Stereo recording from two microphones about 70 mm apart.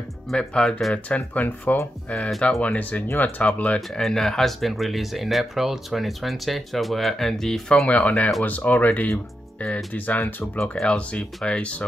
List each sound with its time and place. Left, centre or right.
0.4 s speech: centre
1.0 s speech: left
4.0 s speech: centre